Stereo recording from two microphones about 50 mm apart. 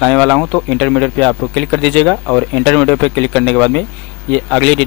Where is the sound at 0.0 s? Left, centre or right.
Centre.